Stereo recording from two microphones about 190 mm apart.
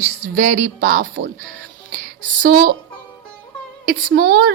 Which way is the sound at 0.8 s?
60° right (ahead or behind).